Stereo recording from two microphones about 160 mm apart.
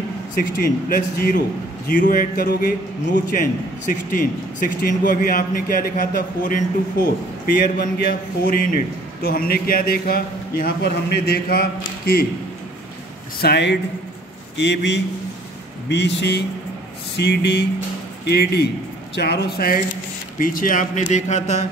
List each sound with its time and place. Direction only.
0.4 s speech: 65° left (ahead or behind)
3.8 s a man's voice: 60° left (ahead or behind)
13.4 s speech: 90° left; by 21.6 s 45° left (ahead or behind)